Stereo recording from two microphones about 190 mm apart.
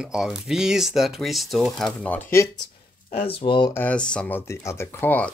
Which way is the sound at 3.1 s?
30° left (ahead or behind).